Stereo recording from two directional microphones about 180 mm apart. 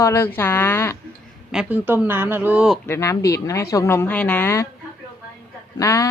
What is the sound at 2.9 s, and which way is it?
Speech, 15° left (ahead or behind).